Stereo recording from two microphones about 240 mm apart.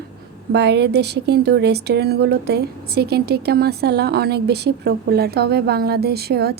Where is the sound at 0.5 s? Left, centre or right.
Right.